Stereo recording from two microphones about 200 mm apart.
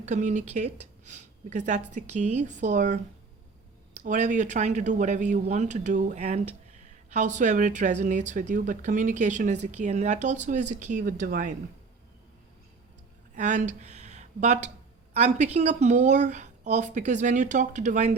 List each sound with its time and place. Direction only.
0.0 s speech: 35° right (ahead or behind)
13.3 s speech: 35° right (ahead or behind)